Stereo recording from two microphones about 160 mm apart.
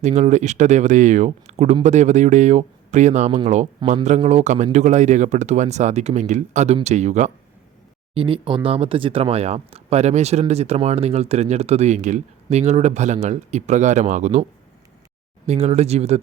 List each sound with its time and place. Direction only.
0.0 s speech: 45° right (ahead or behind)
8.1 s speech: 35° right (ahead or behind)
15.4 s speech: 40° right (ahead or behind)